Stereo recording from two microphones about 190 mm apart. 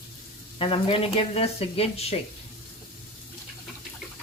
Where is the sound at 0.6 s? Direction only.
30° left (ahead or behind).